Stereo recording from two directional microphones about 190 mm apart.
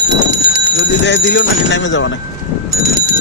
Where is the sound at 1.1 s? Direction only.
70° left (ahead or behind).